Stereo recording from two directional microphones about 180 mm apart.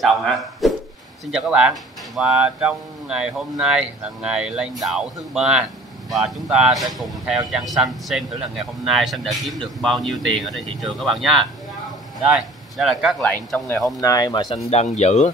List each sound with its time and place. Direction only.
0.0 s speech: centre (ahead or behind)
13.9 s speech: 20° left (ahead or behind)
14.7 s speech: 40° left (ahead or behind)